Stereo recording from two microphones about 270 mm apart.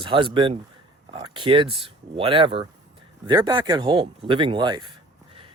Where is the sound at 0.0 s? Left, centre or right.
Centre.